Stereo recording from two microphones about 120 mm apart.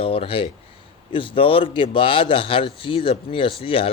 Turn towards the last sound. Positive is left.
turn(degrees=50)  # may be behind; listen again after turning